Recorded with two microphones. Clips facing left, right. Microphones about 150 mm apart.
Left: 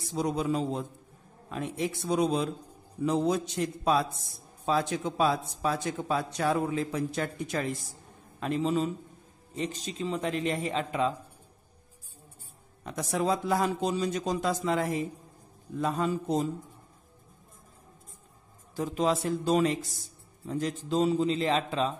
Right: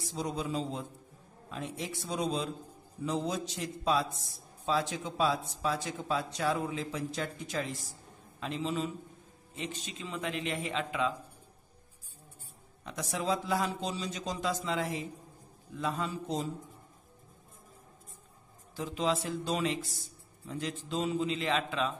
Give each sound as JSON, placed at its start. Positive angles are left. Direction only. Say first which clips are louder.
{"t": 0.1, "sound": "a man's voice", "louder": "left 6 dB", "side_deg": 60}
{"t": 8.4, "sound": "a man's voice", "louder": "left 6 dB", "side_deg": 45}
{"t": 12.8, "sound": "a man's voice", "louder": "left 5 dB", "side_deg": 50}
{"t": 18.8, "sound": "a man's voice", "louder": "left 4 dB", "side_deg": 45}